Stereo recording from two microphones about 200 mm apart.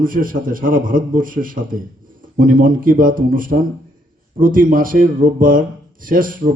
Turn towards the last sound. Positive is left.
turn(degrees=-45)  # may be behind; listen again after turning